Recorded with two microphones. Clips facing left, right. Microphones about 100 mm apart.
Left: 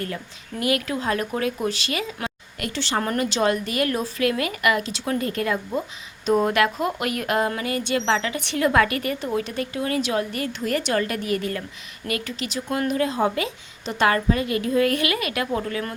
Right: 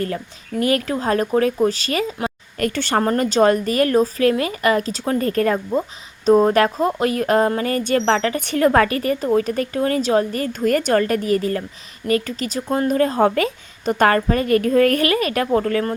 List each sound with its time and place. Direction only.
0.6 s speech: 35° right (ahead or behind)
2.2 s a sound: 45° right (ahead or behind)
3.0 s a woman's voice: 35° right (ahead or behind)